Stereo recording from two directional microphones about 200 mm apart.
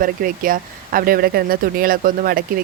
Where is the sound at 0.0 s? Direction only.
45° right (ahead or behind).